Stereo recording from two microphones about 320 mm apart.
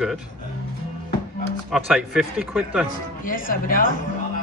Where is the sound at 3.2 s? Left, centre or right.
Left.